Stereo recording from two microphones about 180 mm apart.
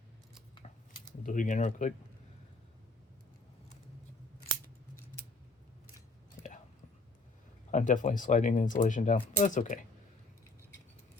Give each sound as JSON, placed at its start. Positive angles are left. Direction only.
{"t": 0.6, "sound": "keys jangling", "side_deg": 35}
{"t": 1.2, "sound": "speech", "side_deg": 45}
{"t": 7.7, "sound": "speech", "side_deg": 45}